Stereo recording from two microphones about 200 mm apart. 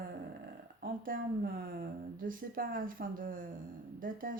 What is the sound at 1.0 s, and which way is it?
Speech, 45° right (ahead or behind).